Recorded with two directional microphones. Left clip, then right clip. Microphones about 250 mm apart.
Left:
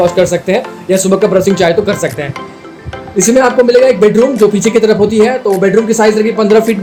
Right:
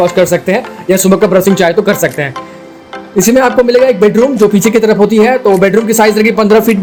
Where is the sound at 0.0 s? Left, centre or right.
Right.